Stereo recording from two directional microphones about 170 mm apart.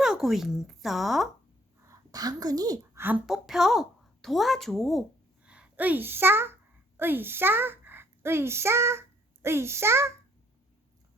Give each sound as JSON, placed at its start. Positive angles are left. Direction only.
{"t": 0.0, "sound": "speech", "side_deg": 0}
{"t": 1.9, "sound": "a woman's voice", "side_deg": -20}
{"t": 3.0, "sound": "a woman's voice", "side_deg": -5}